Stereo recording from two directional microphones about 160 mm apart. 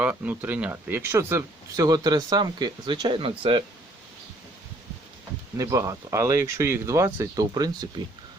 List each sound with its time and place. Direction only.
0.0 s speech: 10° right (ahead or behind); by 3.6 s 35° right (ahead or behind)
5.5 s speech: 20° right (ahead or behind)